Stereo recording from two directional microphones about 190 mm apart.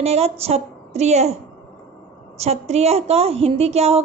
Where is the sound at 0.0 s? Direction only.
35° right (ahead or behind).